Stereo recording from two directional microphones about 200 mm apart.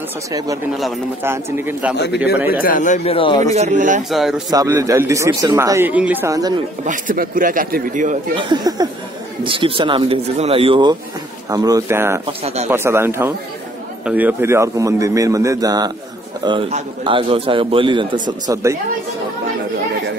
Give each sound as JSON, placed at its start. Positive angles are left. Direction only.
{"t": 0.3, "sound": "speech", "side_deg": -20}
{"t": 2.6, "sound": "speech", "side_deg": 40}
{"t": 3.5, "sound": "a man's voice", "side_deg": -35}
{"t": 4.1, "sound": "speech", "side_deg": 0}
{"t": 4.5, "sound": "speech", "side_deg": -15}
{"t": 6.8, "sound": "a man's voice", "side_deg": -40}
{"t": 8.4, "sound": "a man's voice", "side_deg": -20}
{"t": 12.3, "sound": "a man's voice", "side_deg": -30}
{"t": 12.6, "sound": "a man's voice", "side_deg": -10}